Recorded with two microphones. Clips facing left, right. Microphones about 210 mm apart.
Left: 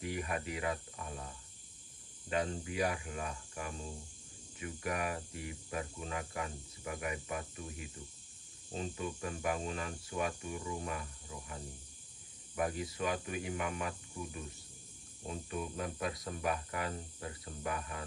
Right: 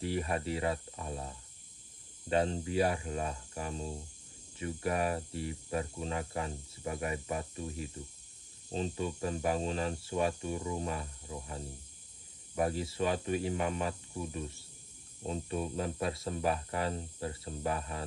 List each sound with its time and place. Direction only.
0.0 s speech: 30° right (ahead or behind)
15.5 s speech: 30° right (ahead or behind)